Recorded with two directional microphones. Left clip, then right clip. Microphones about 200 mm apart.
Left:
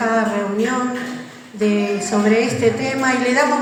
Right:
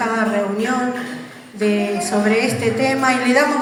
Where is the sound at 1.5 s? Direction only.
35° right (ahead or behind).